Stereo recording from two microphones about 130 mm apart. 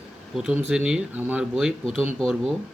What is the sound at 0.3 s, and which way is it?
Speech, 5° right (ahead or behind).